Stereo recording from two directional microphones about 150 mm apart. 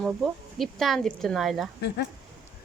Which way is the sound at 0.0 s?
Centre (ahead or behind).